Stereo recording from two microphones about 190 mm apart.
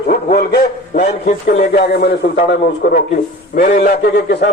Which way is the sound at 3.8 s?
55° left (ahead or behind).